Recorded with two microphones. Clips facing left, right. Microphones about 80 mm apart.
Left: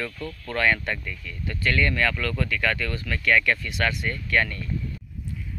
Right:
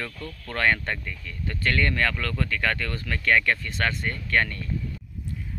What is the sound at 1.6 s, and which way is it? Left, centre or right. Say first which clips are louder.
Speech: left 1 dB; right.